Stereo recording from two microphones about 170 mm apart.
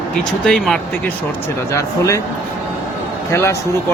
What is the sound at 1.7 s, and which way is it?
Speech, 20° left (ahead or behind).